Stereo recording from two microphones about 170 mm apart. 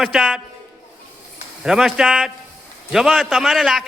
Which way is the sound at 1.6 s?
Centre (ahead or behind).